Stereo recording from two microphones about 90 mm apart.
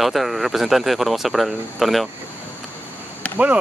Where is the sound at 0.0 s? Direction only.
Centre (ahead or behind).